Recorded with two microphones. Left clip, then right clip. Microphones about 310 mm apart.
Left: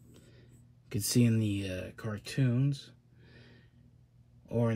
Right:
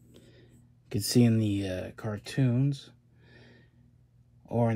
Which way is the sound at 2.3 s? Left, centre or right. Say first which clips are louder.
Right 3 dB; right.